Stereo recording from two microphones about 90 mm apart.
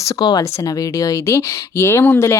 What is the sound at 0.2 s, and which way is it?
A woman's voice, 45° left (ahead or behind).